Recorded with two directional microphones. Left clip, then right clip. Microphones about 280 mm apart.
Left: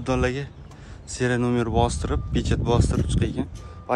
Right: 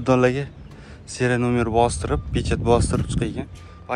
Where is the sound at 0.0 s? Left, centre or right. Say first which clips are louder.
Right 6 dB; centre.